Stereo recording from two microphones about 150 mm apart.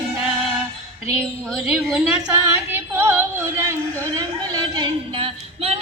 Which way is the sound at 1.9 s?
5° right (ahead or behind).